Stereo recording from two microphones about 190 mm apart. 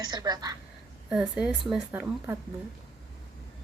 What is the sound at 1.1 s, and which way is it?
Speech, 5° right (ahead or behind).